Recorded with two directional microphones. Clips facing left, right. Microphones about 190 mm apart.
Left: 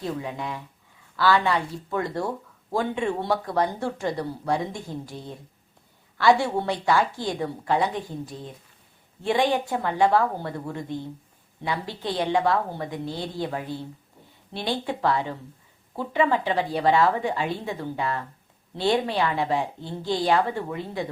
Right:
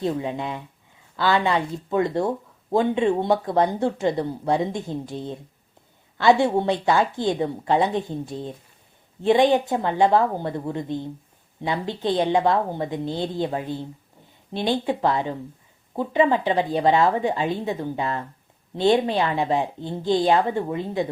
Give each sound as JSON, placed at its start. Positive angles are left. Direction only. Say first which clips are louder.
{"t": 0.0, "sound": "speech", "louder": "right 5 dB", "side_deg": -25}